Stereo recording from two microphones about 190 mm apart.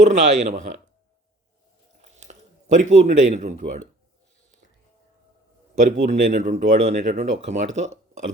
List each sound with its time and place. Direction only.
0.0 s speech: 40° right (ahead or behind)
2.7 s speech: 40° right (ahead or behind)
5.7 s speech: 40° right (ahead or behind)